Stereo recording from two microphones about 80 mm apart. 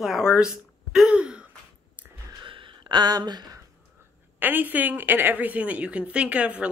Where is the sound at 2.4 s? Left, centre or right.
Right.